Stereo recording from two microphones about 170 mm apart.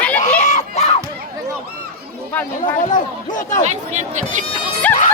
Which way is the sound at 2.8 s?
50° left (ahead or behind).